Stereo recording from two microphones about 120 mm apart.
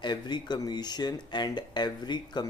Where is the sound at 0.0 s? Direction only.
40° left (ahead or behind).